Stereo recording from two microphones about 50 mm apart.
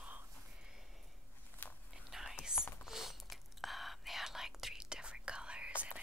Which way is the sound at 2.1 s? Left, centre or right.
Centre.